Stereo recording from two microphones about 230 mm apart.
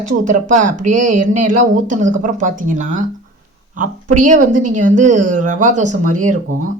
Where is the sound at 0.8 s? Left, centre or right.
Right.